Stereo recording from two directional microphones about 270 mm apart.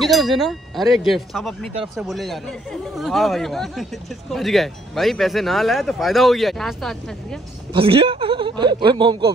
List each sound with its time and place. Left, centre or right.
0.0 s speech: centre
7.7 s speech: right